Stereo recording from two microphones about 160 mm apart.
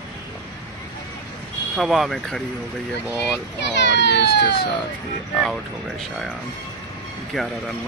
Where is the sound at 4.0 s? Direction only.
90° left.